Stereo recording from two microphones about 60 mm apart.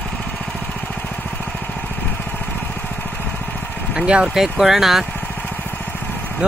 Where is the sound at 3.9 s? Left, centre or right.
Centre.